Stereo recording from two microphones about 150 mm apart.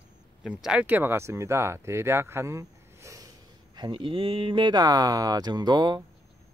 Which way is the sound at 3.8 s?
35° right (ahead or behind).